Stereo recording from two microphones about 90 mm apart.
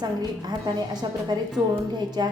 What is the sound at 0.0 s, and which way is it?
Speech, 50° right (ahead or behind).